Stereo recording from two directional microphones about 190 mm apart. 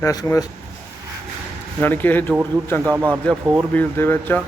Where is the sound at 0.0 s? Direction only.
15° left (ahead or behind).